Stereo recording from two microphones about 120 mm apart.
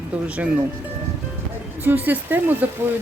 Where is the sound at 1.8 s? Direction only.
15° right (ahead or behind).